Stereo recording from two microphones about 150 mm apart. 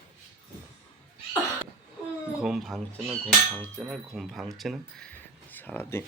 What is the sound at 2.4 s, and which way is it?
Speech, centre (ahead or behind).